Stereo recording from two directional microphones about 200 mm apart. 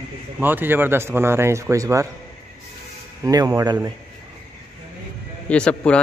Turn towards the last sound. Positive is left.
turn(degrees=5)  # may be behind; listen again after turning